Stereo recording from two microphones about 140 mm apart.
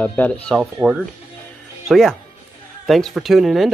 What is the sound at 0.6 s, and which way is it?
Speech, 5° right (ahead or behind).